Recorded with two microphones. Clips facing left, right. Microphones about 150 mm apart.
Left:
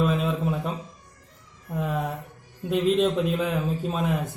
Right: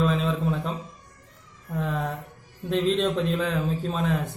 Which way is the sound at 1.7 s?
10° left (ahead or behind).